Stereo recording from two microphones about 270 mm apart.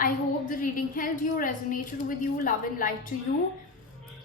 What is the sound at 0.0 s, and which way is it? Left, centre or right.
A woman's voice, left.